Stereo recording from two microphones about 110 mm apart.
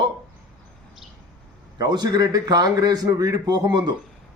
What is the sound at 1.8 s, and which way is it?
Speech, 40° right (ahead or behind).